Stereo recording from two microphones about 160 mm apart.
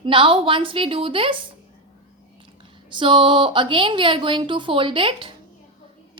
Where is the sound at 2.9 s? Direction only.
30° right (ahead or behind).